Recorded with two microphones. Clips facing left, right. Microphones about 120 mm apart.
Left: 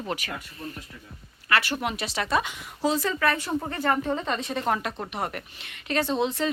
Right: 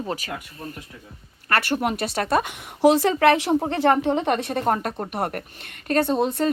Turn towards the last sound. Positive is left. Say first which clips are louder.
# right 4 dB
turn(degrees=-50)  # may be behind; listen again after turning